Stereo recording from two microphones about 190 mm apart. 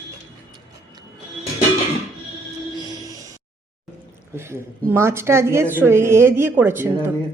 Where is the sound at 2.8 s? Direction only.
20° right (ahead or behind).